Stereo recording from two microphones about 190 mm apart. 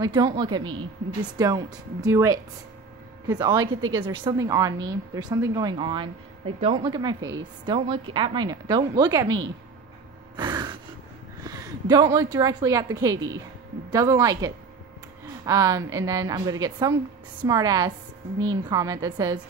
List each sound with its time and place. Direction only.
0.0 s a woman's voice: 20° right (ahead or behind)
10.3 s gasp: 20° right (ahead or behind)
11.4 s a woman's voice: 20° right (ahead or behind)